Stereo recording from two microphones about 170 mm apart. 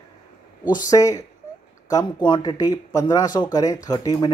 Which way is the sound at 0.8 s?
20° left (ahead or behind).